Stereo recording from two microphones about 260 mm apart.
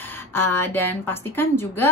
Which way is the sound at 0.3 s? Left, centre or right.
Centre.